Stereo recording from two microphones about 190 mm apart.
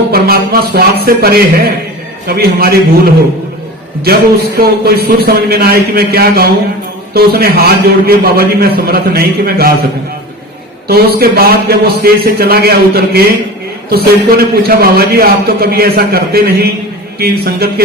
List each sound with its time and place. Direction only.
0.1 s a man's voice: 55° right (ahead or behind)
4.0 s a man's voice: 55° right (ahead or behind)
10.8 s a man's voice: 55° right (ahead or behind)